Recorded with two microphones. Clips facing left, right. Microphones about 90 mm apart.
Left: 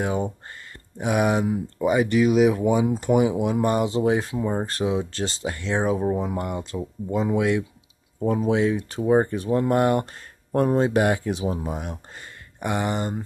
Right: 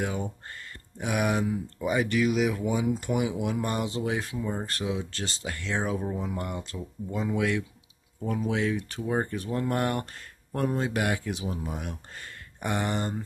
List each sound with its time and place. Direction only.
0.0 s speech: 25° left (ahead or behind)
2.9 s speech: 35° left (ahead or behind)
12.5 s speech: 10° left (ahead or behind)